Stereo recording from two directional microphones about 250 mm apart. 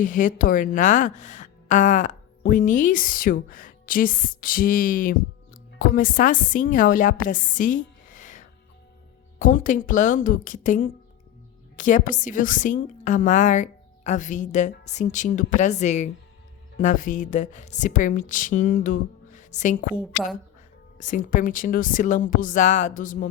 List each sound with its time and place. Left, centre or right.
0.0 s a woman's voice: left
21.0 s speech: left